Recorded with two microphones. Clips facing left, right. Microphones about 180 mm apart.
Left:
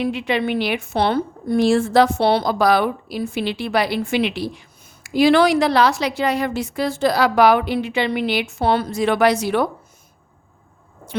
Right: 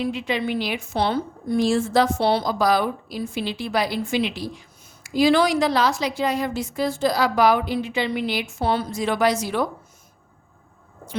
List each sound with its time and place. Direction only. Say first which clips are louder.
0.0 s a woman's voice: left 4 dB; 65° left (ahead or behind)